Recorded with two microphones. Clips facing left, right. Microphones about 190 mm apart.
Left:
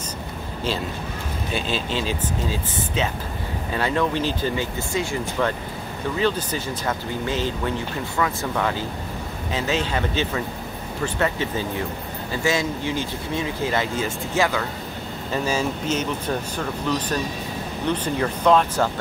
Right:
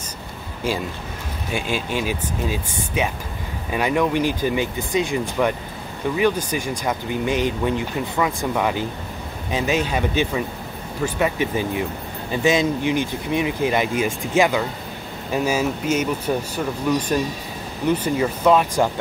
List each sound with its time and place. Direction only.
1.5 s speech: 15° right (ahead or behind)